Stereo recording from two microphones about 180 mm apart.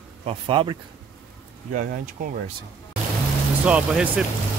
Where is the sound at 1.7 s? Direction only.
45° right (ahead or behind).